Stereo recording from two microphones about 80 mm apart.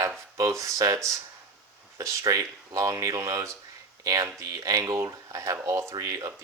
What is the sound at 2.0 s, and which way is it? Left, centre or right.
Speech, right.